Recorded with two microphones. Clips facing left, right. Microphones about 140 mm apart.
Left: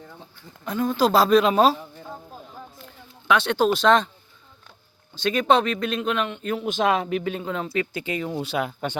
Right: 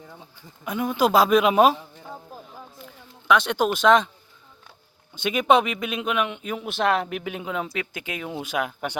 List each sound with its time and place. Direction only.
0.6 s speech: 10° right (ahead or behind)
3.2 s speech: 5° right (ahead or behind)
5.2 s speech: 10° right (ahead or behind)
6.7 s speech: 5° left (ahead or behind)
7.1 s speech: 5° right (ahead or behind)